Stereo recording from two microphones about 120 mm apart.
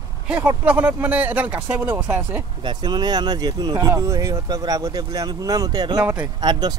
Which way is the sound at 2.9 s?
35° right (ahead or behind).